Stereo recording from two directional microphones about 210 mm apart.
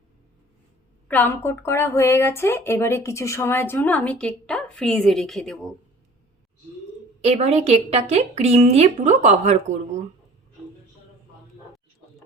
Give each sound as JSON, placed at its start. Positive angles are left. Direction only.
{"t": 1.0, "sound": "a woman's voice", "side_deg": 10}
{"t": 7.2, "sound": "a woman's voice", "side_deg": -30}